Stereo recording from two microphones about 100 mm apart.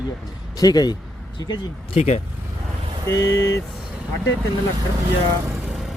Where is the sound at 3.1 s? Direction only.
30° left (ahead or behind).